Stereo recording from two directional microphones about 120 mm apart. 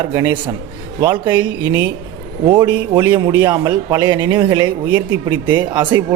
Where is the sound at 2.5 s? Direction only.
40° right (ahead or behind).